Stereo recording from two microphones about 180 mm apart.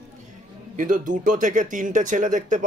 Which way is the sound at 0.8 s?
45° right (ahead or behind).